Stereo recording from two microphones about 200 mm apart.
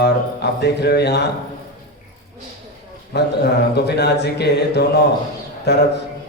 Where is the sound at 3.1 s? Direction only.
55° left (ahead or behind).